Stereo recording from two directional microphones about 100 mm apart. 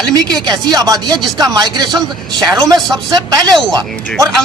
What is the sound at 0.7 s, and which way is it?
Speech, 40° right (ahead or behind).